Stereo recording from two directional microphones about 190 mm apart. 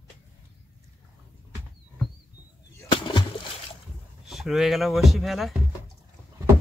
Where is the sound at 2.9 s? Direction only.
25° left (ahead or behind).